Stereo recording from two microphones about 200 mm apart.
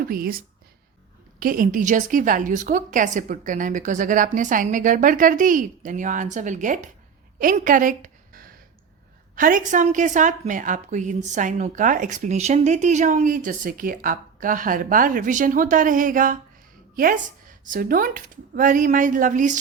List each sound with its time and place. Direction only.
0.1 s a woman's voice: 45° right (ahead or behind)
7.3 s a sound: 40° right (ahead or behind)
9.3 s a woman's voice: 45° right (ahead or behind)